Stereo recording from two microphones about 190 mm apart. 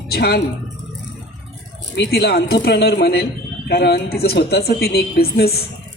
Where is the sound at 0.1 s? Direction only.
55° left (ahead or behind).